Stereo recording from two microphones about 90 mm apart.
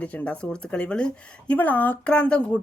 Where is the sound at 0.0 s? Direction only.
15° left (ahead or behind).